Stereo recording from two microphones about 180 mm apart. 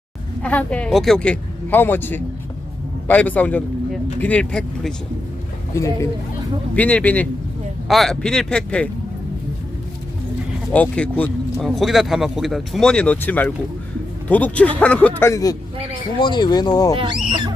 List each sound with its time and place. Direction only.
0.4 s a man's voice: 5° left (ahead or behind)
5.7 s speech: 15° left (ahead or behind)
10.7 s speech: 5° left (ahead or behind)